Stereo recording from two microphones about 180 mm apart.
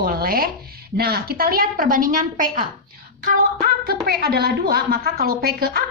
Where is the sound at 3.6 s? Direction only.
60° right (ahead or behind).